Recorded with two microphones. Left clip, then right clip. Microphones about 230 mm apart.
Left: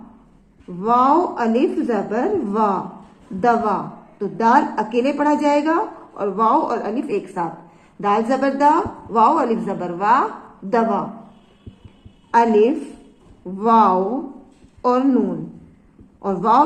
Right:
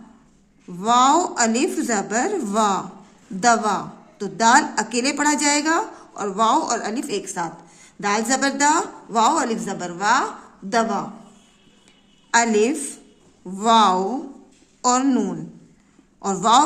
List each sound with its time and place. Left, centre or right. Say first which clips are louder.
0.8 s a woman's voice: left 1 dB; right
12.3 s a woman's voice: left 3 dB; right